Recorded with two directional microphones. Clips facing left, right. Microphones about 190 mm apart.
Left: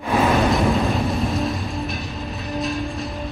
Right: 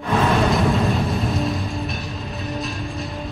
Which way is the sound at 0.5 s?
Centre (ahead or behind).